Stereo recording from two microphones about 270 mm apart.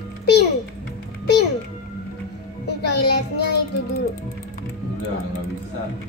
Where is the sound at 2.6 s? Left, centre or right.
Left.